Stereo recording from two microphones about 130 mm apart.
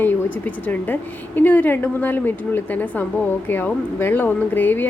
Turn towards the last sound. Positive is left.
turn(degrees=15)  # may be behind; listen again after turning